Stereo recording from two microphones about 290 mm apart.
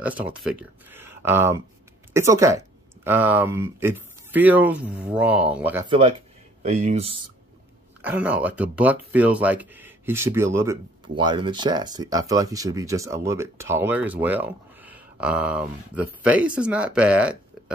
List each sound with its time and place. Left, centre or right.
0.0 s speech: centre
6.6 s speech: right
8.0 s speech: centre